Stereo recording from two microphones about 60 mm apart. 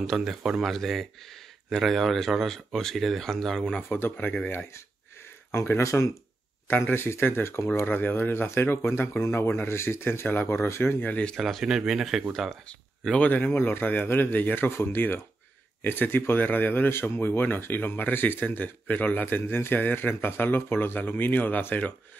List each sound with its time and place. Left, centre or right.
0.0 s speech: centre
3.9 s speech: left
5.5 s speech: left
6.7 s speech: left
7.8 s speech: left
11.3 s speech: centre
13.2 s speech: left